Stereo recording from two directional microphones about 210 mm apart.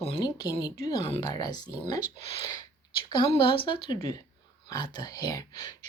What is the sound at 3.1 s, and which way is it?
Speech, 25° left (ahead or behind).